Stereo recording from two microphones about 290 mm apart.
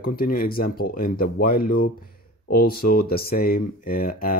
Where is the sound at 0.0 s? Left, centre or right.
Left.